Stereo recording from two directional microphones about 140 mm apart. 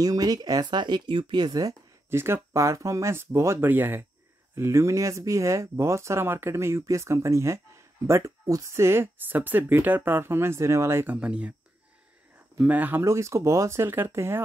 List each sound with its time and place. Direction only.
0.0 s speech: 25° right (ahead or behind)
11.1 s speech: 5° right (ahead or behind)
12.5 s speech: 10° right (ahead or behind)